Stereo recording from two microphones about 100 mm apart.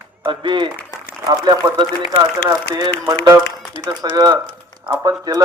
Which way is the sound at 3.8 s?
50° right (ahead or behind).